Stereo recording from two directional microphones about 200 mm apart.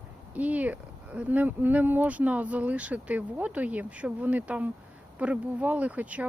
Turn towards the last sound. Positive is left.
turn(degrees=-5)  # may be behind; listen again after turning